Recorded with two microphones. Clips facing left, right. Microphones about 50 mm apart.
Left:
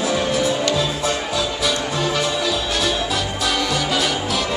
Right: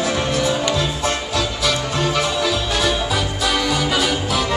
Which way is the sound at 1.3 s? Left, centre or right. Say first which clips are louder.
Right 1 dB; centre.